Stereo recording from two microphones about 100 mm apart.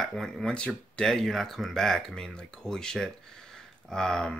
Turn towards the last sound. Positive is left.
turn(degrees=5)  # may be behind; listen again after turning